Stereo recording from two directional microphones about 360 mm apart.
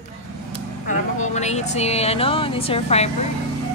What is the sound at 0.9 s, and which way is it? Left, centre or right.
Speech, centre.